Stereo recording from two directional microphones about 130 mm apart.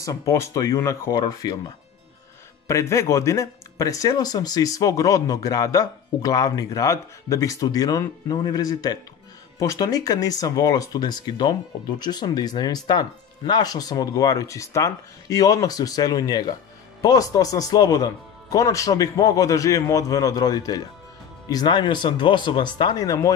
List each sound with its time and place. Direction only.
0.0 s speech: 25° left (ahead or behind)
2.7 s speech: 25° left (ahead or behind)